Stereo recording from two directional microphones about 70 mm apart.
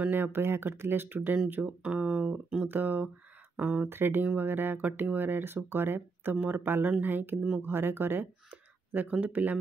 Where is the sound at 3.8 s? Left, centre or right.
Right.